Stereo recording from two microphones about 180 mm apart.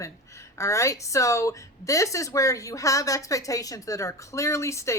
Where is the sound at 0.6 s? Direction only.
15° left (ahead or behind).